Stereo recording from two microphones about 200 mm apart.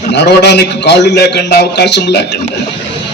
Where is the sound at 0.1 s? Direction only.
55° left (ahead or behind).